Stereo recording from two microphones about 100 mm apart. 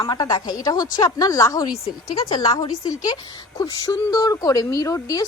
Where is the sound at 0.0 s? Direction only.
45° left (ahead or behind).